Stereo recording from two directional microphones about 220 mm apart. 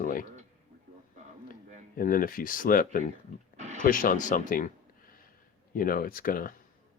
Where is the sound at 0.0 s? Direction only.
40° left (ahead or behind).